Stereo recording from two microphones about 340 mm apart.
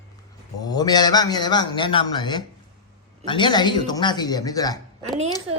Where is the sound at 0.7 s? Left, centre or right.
Centre.